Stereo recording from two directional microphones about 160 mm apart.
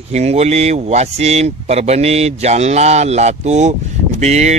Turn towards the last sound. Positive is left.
turn(degrees=-45)  # may be behind; listen again after turning